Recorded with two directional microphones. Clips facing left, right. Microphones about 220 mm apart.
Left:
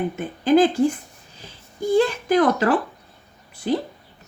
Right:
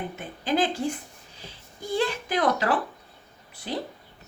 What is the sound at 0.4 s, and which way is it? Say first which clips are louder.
Speech: left 9 dB; 50° left (ahead or behind).